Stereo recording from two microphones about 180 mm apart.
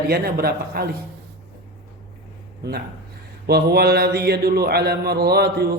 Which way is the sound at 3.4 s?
60° right (ahead or behind).